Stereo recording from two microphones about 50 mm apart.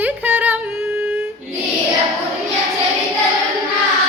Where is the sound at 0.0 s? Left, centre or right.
Right.